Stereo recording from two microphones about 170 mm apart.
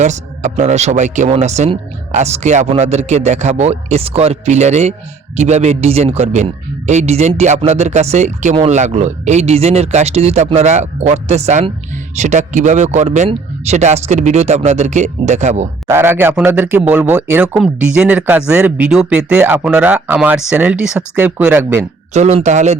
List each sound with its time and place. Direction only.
0.0 s a man's voice: 45° right (ahead or behind)
15.9 s speech: 15° right (ahead or behind)
22.1 s speech: 40° right (ahead or behind)